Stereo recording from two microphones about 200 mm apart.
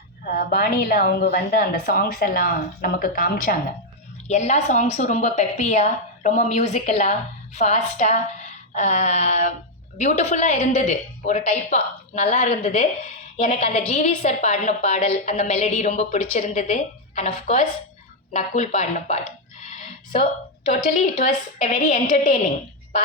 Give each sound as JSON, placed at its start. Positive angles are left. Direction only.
{"t": 0.3, "sound": "a woman's voice", "side_deg": 45}
{"t": 4.3, "sound": "a woman's voice", "side_deg": 35}
{"t": 20.9, "sound": "a woman's voice", "side_deg": 40}